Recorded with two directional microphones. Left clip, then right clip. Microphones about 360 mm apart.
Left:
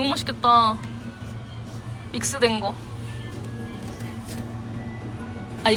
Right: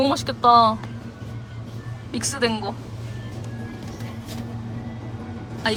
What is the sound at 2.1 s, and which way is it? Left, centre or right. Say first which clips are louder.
Speech: left 1 dB; centre.